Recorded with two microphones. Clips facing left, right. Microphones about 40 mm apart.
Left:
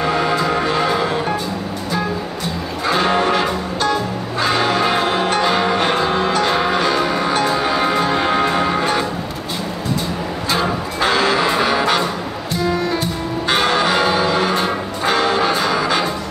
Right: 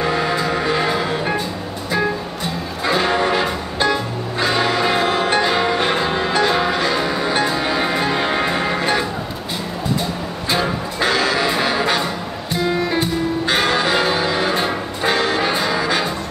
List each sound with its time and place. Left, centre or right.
0.0 s music: centre
2.9 s music: centre
3.3 s music: centre
4.6 s change ringing: centre
5.4 s music: centre
5.9 s music: centre
6.4 s music: centre
11.0 s music: left
11.3 s music: centre
12.5 s music: right
13.6 s music: centre